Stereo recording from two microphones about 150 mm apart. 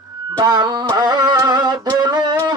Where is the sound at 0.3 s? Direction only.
30° right (ahead or behind).